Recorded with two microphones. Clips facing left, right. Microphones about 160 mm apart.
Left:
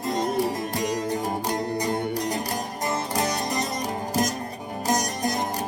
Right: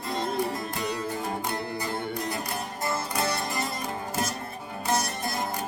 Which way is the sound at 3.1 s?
40° left (ahead or behind).